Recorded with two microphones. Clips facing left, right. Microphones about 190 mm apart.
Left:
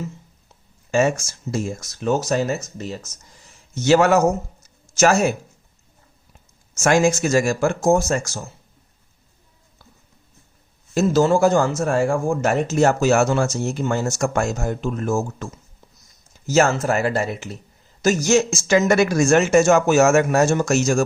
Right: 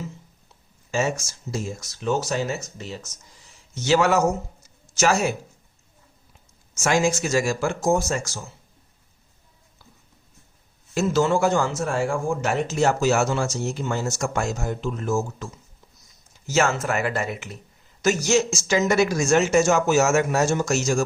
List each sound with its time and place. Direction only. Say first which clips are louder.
0.9 s speech: left 6 dB; 55° left (ahead or behind)
6.7 s speech: left 4 dB; 50° left (ahead or behind)
10.9 s speech: left 4 dB; 40° left (ahead or behind)
16.5 s speech: left 4 dB; 35° left (ahead or behind); by 21.0 s 55° left (ahead or behind)